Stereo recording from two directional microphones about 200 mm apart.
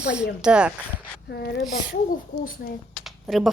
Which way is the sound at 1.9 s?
45° left (ahead or behind).